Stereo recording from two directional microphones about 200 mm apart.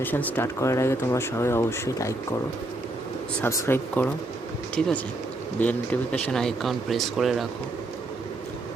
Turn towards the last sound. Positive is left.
turn(degrees=0)  # may be behind; listen again after turning